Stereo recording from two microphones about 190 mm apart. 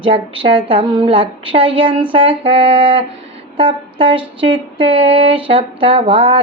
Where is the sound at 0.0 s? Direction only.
25° right (ahead or behind).